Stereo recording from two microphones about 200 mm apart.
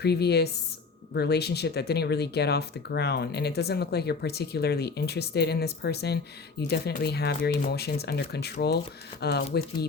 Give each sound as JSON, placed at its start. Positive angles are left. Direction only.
{"t": 0.0, "sound": "speech", "side_deg": 55}